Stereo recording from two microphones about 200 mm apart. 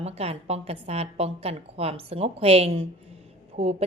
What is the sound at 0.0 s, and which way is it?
A woman's voice, 30° right (ahead or behind).